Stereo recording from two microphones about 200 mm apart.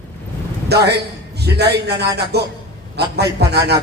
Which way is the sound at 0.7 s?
55° right (ahead or behind).